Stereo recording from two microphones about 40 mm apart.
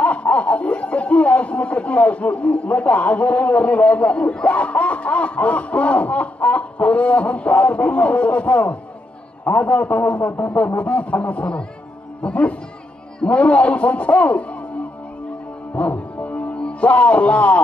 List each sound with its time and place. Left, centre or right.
0.0 s a man's voice: left
15.8 s music: left